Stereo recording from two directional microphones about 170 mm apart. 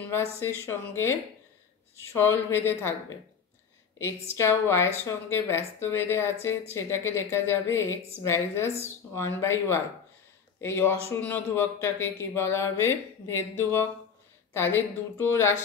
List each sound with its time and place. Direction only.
0.1 s a man's voice: 15° left (ahead or behind)
4.0 s a man's voice: 15° left (ahead or behind)